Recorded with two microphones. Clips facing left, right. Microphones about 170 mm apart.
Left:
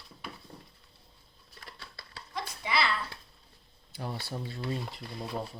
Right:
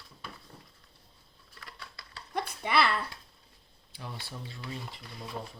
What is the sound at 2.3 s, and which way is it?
Babbling, 55° right (ahead or behind).